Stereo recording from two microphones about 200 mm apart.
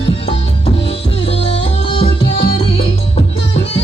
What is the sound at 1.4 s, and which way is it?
Music, 30° left (ahead or behind).